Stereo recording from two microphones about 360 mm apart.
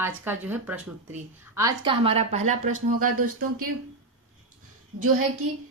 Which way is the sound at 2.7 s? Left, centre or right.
Right.